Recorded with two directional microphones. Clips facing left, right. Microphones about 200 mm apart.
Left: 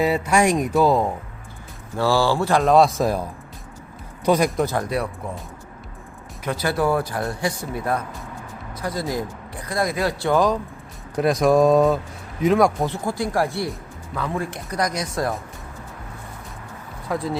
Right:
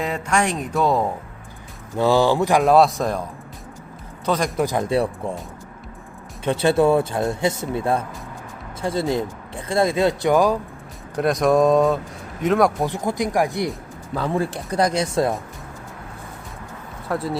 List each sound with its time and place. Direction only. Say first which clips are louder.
0.0 s speech: left 4 dB; 10° left (ahead or behind)
0.7 s speech: left 2 dB; centre (ahead or behind)
2.0 s speech: right 3 dB; 20° right (ahead or behind)
2.6 s speech: left 1 dB; centre (ahead or behind)
4.3 s speech: left 4 dB; 10° left (ahead or behind)
4.5 s speech: right 1 dB; 15° right (ahead or behind)
6.4 s speech: right 5 dB; 25° right (ahead or behind); by 10.6 s 10° right (ahead or behind)
11.2 s speech: even; centre (ahead or behind)
12.8 s speech: right 1 dB; 15° right (ahead or behind)
14.1 s speech: right 4 dB; 30° right (ahead or behind)
17.1 s speech: right 1 dB; centre (ahead or behind)